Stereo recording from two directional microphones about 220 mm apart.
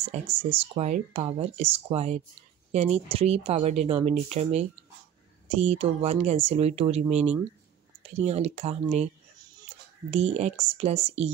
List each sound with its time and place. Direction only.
0.0 s speech: 30° right (ahead or behind)
10.1 s speech: 30° right (ahead or behind)